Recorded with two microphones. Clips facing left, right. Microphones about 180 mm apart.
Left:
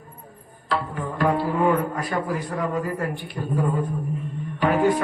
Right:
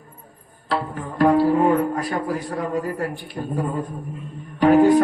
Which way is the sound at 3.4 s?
40° right (ahead or behind).